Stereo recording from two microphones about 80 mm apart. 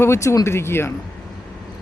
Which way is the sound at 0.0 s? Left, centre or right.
Left.